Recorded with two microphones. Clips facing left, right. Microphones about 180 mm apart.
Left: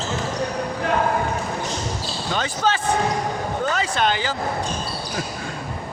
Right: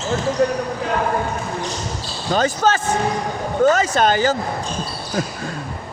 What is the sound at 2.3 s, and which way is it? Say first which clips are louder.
Speech: right 6 dB; 40° right (ahead or behind).